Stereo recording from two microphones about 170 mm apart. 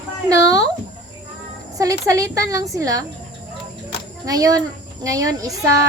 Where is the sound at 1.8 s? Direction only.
20° right (ahead or behind).